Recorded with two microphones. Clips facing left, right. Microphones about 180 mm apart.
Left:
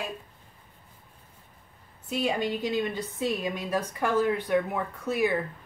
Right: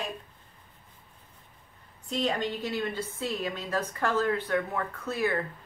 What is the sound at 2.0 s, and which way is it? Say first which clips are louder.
A woman's voice: left 1 dB; 10° left (ahead or behind).